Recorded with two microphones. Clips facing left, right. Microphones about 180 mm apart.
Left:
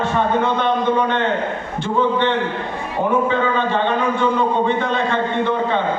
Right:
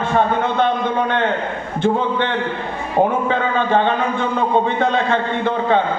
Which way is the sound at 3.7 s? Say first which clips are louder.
Right 2 dB; 55° right (ahead or behind).